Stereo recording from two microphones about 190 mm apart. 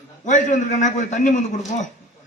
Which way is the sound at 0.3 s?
40° left (ahead or behind).